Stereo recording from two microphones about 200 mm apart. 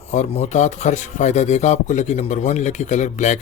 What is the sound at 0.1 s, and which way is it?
Speech, 35° left (ahead or behind).